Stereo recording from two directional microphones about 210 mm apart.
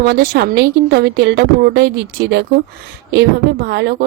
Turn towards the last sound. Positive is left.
turn(degrees=-50)  # may be behind; listen again after turning